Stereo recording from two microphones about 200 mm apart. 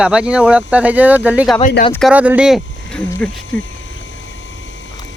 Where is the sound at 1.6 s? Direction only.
45° left (ahead or behind).